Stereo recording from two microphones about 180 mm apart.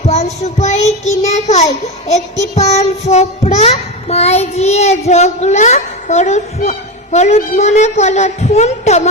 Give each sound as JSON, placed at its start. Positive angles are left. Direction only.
{"t": 0.1, "sound": "child singing", "side_deg": 40}